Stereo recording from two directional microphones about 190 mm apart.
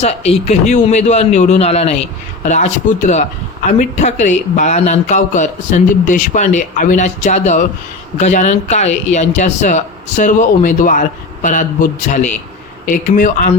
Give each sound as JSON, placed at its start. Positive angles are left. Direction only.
{"t": 0.0, "sound": "a man's voice", "side_deg": 35}